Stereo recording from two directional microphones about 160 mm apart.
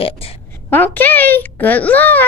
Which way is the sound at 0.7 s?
10° left (ahead or behind).